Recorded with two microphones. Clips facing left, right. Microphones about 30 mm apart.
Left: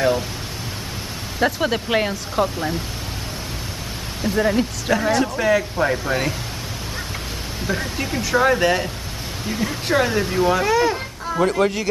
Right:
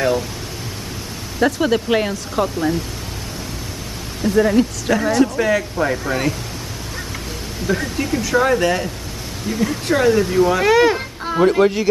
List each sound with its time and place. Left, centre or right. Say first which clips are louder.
1.4 s speech: right 3 dB; centre
4.4 s speech: right 5 dB; centre
7.6 s speech: right 4 dB; centre
10.6 s speech: right 5 dB; right
11.4 s speech: right 5 dB; centre